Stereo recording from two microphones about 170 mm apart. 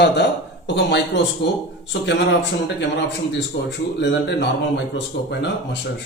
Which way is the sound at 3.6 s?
90° left.